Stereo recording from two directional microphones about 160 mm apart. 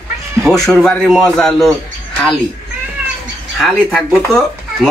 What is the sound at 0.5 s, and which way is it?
A man's voice, 5° left (ahead or behind).